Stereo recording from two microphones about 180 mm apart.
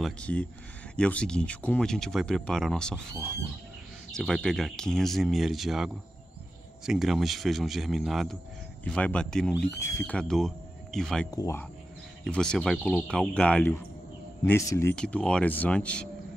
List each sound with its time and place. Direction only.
0.0 s speech: 5° left (ahead or behind)
6.9 s speech: centre (ahead or behind)
9.8 s speech: 15° left (ahead or behind)
11.3 s speech: 20° left (ahead or behind)
12.3 s speech: 5° left (ahead or behind)